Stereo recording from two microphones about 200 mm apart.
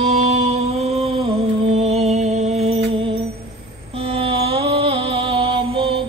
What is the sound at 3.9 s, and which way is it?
Mantra, 30° right (ahead or behind).